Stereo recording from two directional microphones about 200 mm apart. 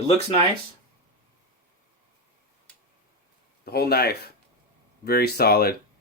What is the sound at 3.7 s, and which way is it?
Speech, 55° left (ahead or behind).